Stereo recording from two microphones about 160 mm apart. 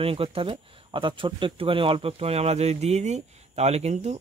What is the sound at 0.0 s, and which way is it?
Speech, 35° right (ahead or behind).